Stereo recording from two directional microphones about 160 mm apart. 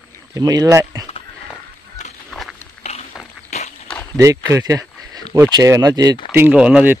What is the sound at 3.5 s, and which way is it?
Walk, 45° left (ahead or behind).